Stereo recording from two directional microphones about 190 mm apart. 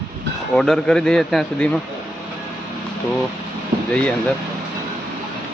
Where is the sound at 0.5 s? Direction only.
5° left (ahead or behind).